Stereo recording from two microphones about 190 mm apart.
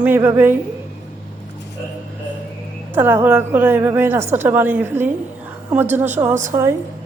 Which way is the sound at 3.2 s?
10° right (ahead or behind).